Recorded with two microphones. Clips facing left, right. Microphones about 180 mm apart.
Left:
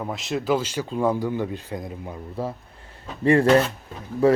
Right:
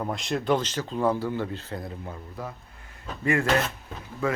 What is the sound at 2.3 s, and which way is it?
Speech, 30° left (ahead or behind).